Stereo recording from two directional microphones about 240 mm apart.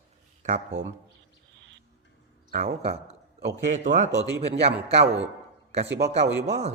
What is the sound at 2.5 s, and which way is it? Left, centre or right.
A man's voice, right.